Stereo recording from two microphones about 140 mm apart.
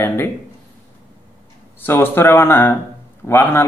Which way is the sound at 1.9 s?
15° left (ahead or behind).